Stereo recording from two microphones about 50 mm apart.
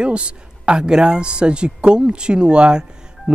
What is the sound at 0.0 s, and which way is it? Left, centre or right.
Speech, right.